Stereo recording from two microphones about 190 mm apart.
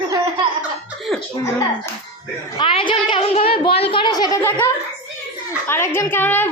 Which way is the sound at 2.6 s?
25° left (ahead or behind).